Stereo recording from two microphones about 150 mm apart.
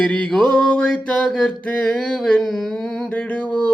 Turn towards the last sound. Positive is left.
turn(degrees=10)  # may be behind; listen again after turning